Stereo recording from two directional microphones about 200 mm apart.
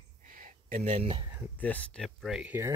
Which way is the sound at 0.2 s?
40° right (ahead or behind).